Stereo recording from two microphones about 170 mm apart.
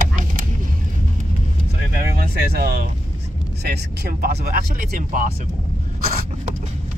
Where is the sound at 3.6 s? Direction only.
75° right (ahead or behind); by 5.3 s 55° right (ahead or behind).